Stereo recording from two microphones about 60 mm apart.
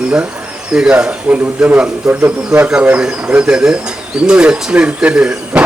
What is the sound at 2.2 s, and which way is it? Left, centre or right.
Speech, right.